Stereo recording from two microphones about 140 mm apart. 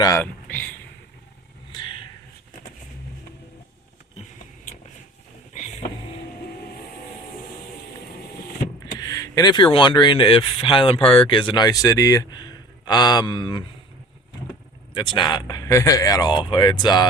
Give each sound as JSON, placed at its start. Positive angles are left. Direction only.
{"t": 0.2, "sound": "speech", "side_deg": 10}
{"t": 1.7, "sound": "a sound", "side_deg": 35}
{"t": 5.5, "sound": "vehicle", "side_deg": 60}
{"t": 9.0, "sound": "speech", "side_deg": 25}
{"t": 14.9, "sound": "speech", "side_deg": 35}